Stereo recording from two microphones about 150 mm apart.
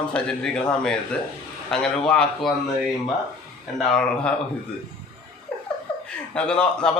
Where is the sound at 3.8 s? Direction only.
5° left (ahead or behind).